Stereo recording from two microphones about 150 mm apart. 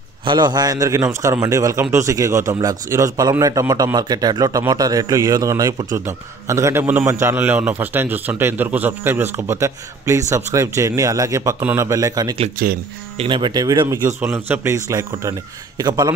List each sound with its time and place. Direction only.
0.2 s a man's voice: 30° right (ahead or behind)
12.6 s speech: 70° right (ahead or behind)
13.2 s a man's voice: 35° right (ahead or behind)